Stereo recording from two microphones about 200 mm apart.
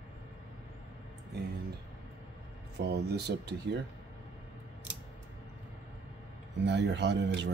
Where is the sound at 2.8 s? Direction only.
55° right (ahead or behind).